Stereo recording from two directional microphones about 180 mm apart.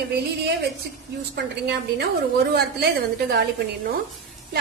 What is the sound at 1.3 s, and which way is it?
Speech, 65° right (ahead or behind).